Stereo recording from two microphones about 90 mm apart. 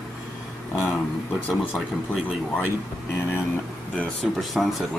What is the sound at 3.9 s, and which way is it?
Speech, 10° left (ahead or behind).